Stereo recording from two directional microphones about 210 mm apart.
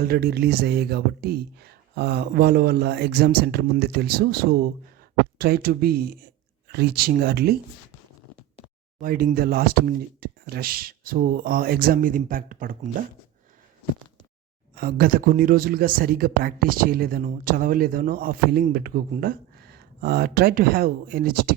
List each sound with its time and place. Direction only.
0.0 s speech: 45° right (ahead or behind)
9.0 s speech: 45° right (ahead or behind)
14.8 s speech: 45° right (ahead or behind)